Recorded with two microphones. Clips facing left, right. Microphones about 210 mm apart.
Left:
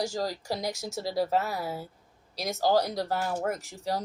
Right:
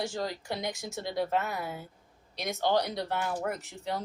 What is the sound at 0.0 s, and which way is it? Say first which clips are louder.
Speech: left 3 dB; 40° left (ahead or behind).